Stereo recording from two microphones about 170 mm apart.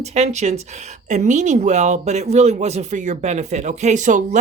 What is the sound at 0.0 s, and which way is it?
Speech, 40° right (ahead or behind).